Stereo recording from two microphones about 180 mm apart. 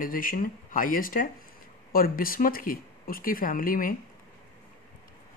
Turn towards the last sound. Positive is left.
turn(degrees=50)  # may be behind; listen again after turning